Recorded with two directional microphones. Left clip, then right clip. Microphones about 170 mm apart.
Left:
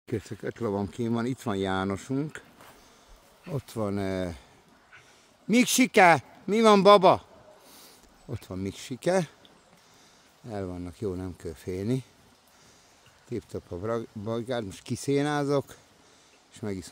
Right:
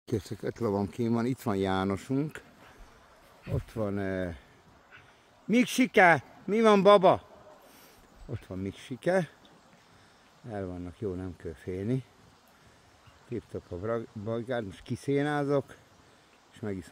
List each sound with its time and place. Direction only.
0.0 s speech: 5° right (ahead or behind)
3.4 s speech: 25° left (ahead or behind)
5.5 s speech: 25° left (ahead or behind)
10.4 s speech: 25° left (ahead or behind)
13.3 s speech: 20° left (ahead or behind)